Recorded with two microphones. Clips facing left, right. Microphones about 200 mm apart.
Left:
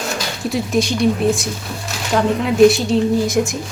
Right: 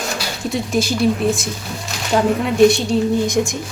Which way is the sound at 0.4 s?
Centre (ahead or behind).